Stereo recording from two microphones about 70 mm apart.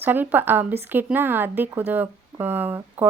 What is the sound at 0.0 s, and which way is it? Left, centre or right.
Speech, right.